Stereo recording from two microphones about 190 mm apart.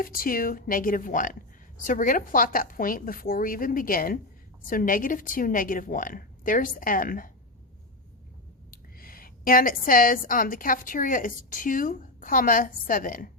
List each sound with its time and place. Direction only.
0.0 s a woman's voice: 50° left (ahead or behind)
8.7 s a woman's voice: 50° left (ahead or behind)